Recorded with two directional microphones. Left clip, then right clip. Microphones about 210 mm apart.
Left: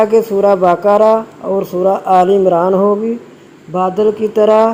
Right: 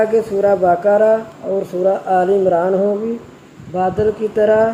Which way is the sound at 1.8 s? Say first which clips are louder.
Left 5 dB; 60° left (ahead or behind).